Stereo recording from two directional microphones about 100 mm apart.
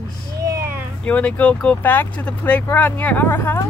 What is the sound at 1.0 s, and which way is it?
Speech, 15° left (ahead or behind).